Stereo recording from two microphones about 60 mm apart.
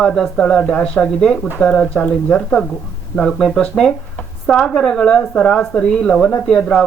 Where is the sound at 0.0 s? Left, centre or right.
Centre.